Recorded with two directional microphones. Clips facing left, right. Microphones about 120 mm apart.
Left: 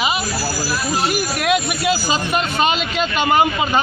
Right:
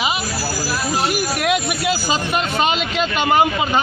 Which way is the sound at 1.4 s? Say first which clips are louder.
Left 2 dB; 15° right (ahead or behind).